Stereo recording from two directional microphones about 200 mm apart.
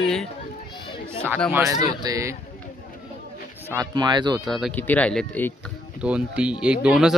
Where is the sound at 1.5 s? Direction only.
10° right (ahead or behind).